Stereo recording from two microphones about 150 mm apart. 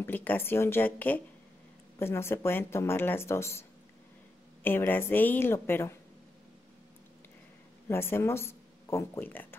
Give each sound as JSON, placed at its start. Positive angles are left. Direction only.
{"t": 0.0, "sound": "speech", "side_deg": 10}
{"t": 4.6, "sound": "speech", "side_deg": 15}
{"t": 7.9, "sound": "speech", "side_deg": 15}